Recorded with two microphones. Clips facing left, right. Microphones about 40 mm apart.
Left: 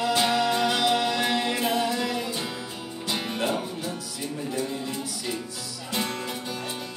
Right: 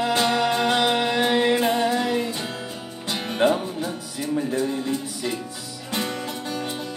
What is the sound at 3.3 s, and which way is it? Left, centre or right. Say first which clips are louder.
Music: right 11 dB; right.